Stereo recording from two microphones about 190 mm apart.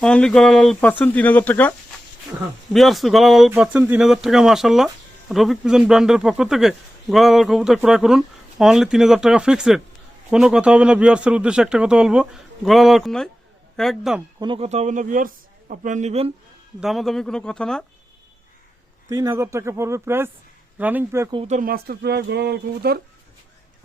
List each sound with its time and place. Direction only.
0.0 s speech: 5° left (ahead or behind)
2.7 s speech: centre (ahead or behind)
14.3 s a man's voice: 25° right (ahead or behind)
16.8 s speech: centre (ahead or behind)
19.0 s speech: 20° right (ahead or behind)
21.2 s speech: 25° right (ahead or behind)
21.5 s speech: 50° right (ahead or behind)